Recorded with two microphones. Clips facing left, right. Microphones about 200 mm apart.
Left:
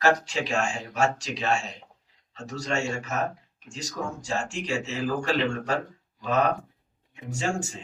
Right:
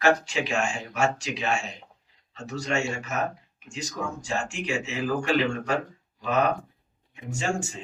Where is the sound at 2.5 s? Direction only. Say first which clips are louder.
Right 1 dB; 35° left (ahead or behind).